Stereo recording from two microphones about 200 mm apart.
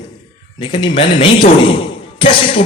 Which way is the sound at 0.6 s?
25° left (ahead or behind).